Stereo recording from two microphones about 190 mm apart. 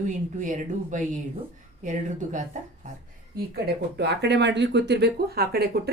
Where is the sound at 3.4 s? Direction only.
55° right (ahead or behind).